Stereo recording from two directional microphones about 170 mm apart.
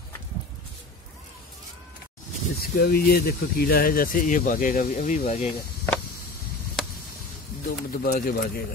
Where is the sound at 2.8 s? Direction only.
70° left (ahead or behind); by 5.5 s 40° left (ahead or behind).